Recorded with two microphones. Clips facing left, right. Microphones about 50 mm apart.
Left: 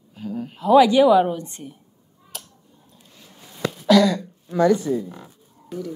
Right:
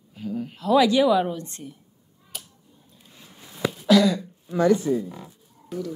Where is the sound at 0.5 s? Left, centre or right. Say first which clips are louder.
Left 5 dB; centre.